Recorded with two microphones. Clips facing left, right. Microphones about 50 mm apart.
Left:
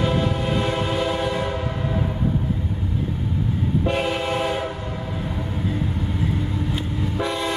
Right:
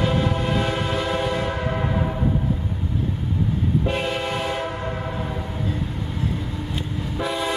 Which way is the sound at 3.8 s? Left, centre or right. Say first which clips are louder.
Left 2 dB; centre.